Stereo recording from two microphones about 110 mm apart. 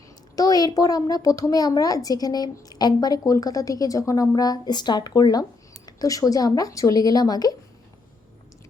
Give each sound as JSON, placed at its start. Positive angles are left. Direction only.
{"t": 0.3, "sound": "a woman's voice", "side_deg": 35}